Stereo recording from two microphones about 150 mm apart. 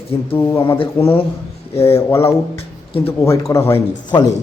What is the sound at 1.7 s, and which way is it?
Speech, 40° left (ahead or behind).